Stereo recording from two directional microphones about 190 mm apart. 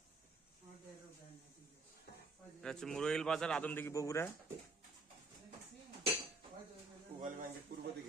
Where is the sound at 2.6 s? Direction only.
5° left (ahead or behind).